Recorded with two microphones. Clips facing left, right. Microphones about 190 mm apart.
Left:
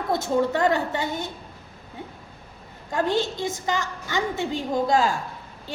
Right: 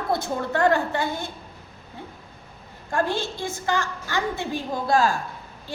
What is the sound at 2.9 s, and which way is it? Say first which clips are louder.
A woman's voice: left 2 dB; 20° left (ahead or behind).